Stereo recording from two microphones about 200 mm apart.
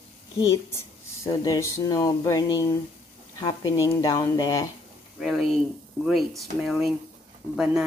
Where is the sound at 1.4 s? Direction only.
15° left (ahead or behind).